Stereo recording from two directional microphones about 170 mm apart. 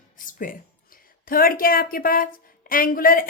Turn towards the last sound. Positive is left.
turn(degrees=55)  # may be behind; listen again after turning